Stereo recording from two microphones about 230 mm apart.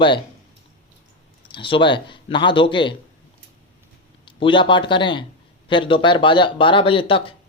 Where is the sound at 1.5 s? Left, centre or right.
Left.